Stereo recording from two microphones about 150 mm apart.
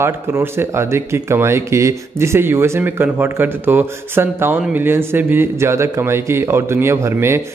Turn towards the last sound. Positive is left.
turn(degrees=-15)  # may be behind; listen again after turning